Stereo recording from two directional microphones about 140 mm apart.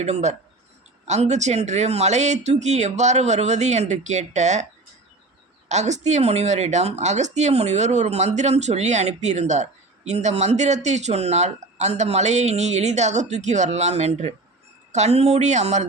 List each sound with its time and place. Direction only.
0.0 s speech: 55° right (ahead or behind)
5.6 s speech: 55° right (ahead or behind)